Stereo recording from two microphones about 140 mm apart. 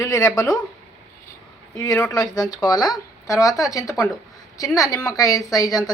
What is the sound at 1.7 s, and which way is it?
Speech, 25° left (ahead or behind).